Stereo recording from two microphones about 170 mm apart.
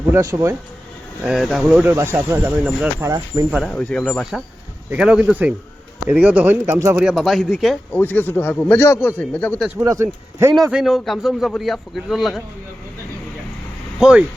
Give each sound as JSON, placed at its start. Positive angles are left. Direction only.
{"t": 0.1, "sound": "speech", "side_deg": -20}
{"t": 1.2, "sound": "a man's voice", "side_deg": 0}
{"t": 3.5, "sound": "a man's voice", "side_deg": 5}
{"t": 7.0, "sound": "a man's voice", "side_deg": 0}
{"t": 7.9, "sound": "a man's voice", "side_deg": 10}
{"t": 9.8, "sound": "speech", "side_deg": -15}
{"t": 10.7, "sound": "a man's voice", "side_deg": 0}
{"t": 14.0, "sound": "a man's voice", "side_deg": -5}